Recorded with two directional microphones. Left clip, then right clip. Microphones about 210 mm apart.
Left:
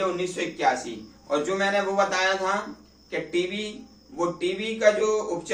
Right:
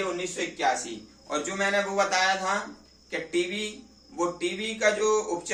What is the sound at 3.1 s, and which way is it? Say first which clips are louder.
Speech: left 2 dB; 15° right (ahead or behind).